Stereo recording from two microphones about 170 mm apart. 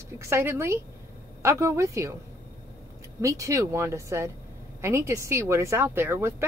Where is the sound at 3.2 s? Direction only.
20° right (ahead or behind).